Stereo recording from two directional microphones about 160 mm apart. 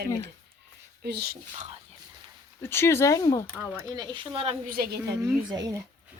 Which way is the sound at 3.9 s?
25° right (ahead or behind).